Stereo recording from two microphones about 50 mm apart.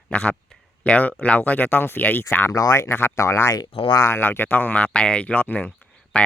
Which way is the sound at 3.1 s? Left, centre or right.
Left.